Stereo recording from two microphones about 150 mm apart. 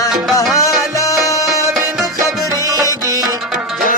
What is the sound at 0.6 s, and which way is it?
Music, 20° left (ahead or behind).